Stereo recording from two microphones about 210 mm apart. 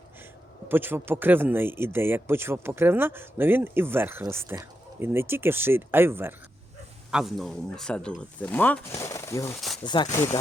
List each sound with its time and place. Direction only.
0.7 s speech: 10° right (ahead or behind); by 10.1 s 20° left (ahead or behind)